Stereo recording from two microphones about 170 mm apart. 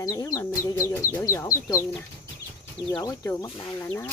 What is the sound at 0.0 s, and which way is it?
Speech, 20° left (ahead or behind).